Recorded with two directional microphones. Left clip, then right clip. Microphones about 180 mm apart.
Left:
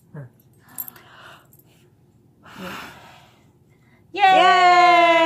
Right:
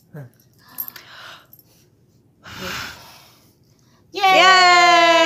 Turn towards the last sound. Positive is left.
turn(degrees=0)  # may be behind; listen again after turning